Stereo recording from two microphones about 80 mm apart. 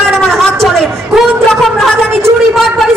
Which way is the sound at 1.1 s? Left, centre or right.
Centre.